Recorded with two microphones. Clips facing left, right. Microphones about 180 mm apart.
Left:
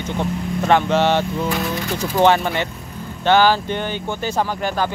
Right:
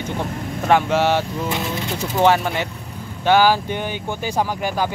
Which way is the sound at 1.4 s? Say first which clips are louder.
Left 2 dB; 25° right (ahead or behind).